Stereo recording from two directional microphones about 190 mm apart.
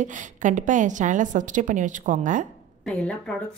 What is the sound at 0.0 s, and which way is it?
A woman's voice, 40° right (ahead or behind).